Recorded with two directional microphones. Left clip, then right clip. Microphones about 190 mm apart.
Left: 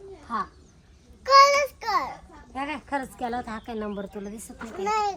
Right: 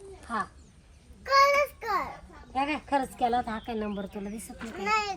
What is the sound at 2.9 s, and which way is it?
Speech, 40° right (ahead or behind).